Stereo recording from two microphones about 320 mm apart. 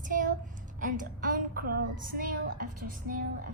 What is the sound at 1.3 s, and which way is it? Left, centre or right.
A woman's voice, right.